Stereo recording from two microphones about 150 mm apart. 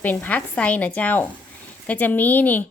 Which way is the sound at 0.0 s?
10° left (ahead or behind).